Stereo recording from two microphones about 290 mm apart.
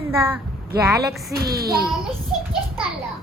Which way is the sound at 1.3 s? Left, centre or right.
Right.